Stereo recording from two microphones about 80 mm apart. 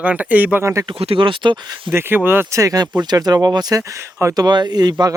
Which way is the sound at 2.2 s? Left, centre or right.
Right.